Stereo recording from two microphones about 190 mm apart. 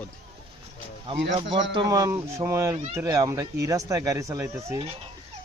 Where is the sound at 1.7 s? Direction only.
20° right (ahead or behind).